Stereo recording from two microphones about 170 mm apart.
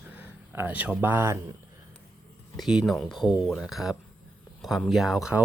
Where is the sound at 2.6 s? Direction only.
Centre (ahead or behind).